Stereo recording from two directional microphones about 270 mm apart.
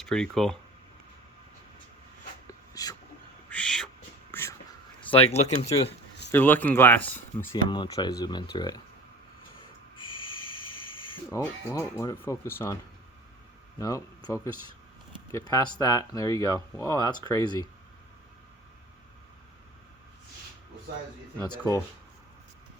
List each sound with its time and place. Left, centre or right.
0.1 s speech: centre
2.5 s a sound: centre
4.3 s whispering: centre
4.9 s speech: left
6.3 s speech: centre
11.3 s speech: centre
13.7 s speech: centre
21.3 s speech: centre